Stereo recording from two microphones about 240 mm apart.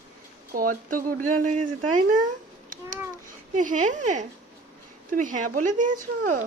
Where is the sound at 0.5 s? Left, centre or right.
Right.